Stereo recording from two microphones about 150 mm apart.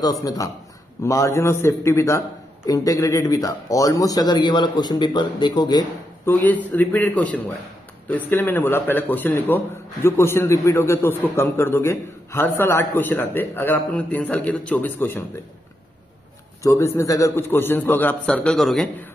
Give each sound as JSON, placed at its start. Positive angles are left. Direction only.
{"t": 0.0, "sound": "a man's voice", "side_deg": 25}
{"t": 6.2, "sound": "a man's voice", "side_deg": 10}
{"t": 16.6, "sound": "a man's voice", "side_deg": 20}